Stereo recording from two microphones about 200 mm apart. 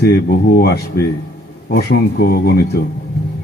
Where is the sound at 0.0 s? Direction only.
55° left (ahead or behind).